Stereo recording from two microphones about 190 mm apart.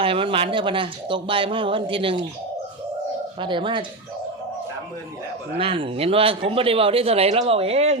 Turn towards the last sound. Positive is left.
turn(degrees=-35)  # may be behind; listen again after turning